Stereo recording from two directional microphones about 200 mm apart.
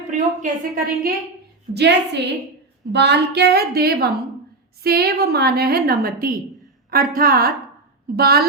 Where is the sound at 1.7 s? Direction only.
55° right (ahead or behind).